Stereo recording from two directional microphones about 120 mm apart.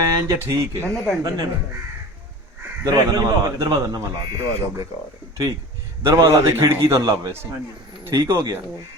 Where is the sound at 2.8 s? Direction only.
30° right (ahead or behind).